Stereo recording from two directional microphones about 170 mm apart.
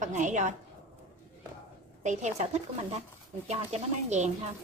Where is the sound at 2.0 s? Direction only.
45° right (ahead or behind).